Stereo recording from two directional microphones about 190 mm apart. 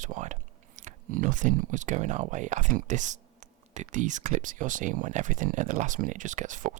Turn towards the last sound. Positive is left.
turn(degrees=-40)  # may be behind; listen again after turning